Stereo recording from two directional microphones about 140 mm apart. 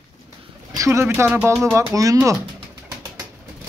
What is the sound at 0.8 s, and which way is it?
Speech, 20° right (ahead or behind).